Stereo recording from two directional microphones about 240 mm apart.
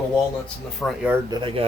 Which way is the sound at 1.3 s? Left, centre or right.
Centre.